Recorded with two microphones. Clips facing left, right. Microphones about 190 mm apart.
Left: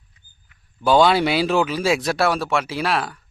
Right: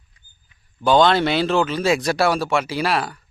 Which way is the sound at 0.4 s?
20° right (ahead or behind).